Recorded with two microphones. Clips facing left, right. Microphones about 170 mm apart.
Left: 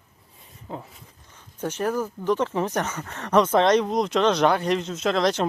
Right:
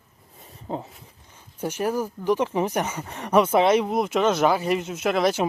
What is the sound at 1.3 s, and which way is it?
Speech, 10° right (ahead or behind).